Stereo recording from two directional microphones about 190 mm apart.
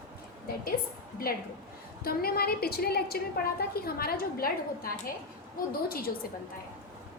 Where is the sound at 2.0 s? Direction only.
55° left (ahead or behind).